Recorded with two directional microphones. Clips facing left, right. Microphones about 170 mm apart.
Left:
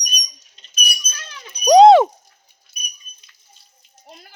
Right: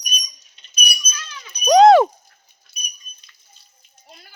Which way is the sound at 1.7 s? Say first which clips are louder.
Left 2 dB; 30° left (ahead or behind).